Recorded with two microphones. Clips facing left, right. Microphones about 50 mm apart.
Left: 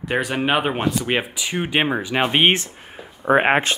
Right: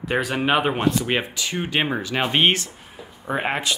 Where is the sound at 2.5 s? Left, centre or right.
Left.